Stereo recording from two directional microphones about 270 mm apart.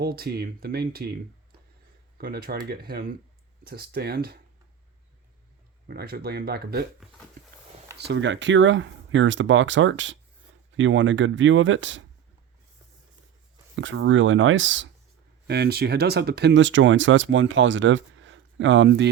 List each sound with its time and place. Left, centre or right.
0.0 s speech: right
2.1 s speech: right
5.9 s speech: right
7.9 s speech: right
13.7 s speech: right